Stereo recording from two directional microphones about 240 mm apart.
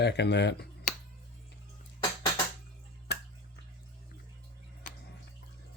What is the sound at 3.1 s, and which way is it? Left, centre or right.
Finger snapping, left.